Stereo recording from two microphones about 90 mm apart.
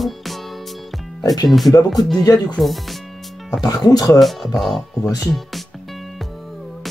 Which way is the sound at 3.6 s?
50° left (ahead or behind).